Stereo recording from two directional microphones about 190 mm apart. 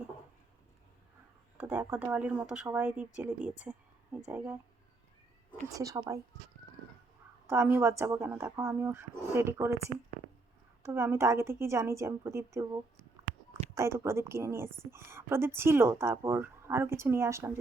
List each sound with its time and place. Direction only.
1.5 s a woman's voice: 10° right (ahead or behind)
5.6 s a woman's voice: 15° right (ahead or behind)
7.4 s a woman's voice: 15° right (ahead or behind)
10.8 s a woman's voice: 15° right (ahead or behind)
13.7 s a woman's voice: 15° right (ahead or behind)